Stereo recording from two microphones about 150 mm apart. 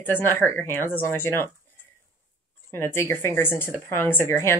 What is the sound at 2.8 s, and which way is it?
Speech, 15° left (ahead or behind).